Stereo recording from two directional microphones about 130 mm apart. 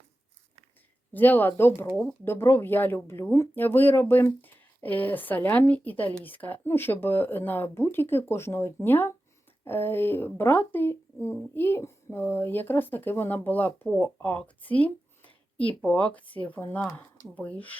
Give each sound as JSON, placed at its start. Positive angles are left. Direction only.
{"t": 1.1, "sound": "speech", "side_deg": 15}